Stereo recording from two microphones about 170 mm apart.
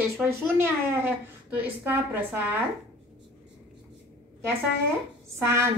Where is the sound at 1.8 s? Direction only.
10° right (ahead or behind).